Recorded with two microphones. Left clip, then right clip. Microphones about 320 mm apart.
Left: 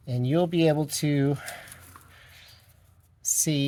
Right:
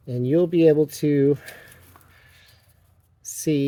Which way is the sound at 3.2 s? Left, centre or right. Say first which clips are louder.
Right 3 dB; left.